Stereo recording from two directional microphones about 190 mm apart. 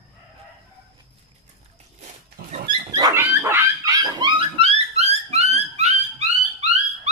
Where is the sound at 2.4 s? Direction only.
55° right (ahead or behind).